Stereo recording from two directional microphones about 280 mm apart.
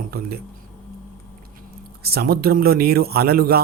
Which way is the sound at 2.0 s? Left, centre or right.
Right.